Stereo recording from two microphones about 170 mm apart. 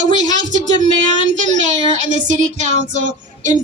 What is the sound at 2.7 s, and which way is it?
Speech, 45° right (ahead or behind).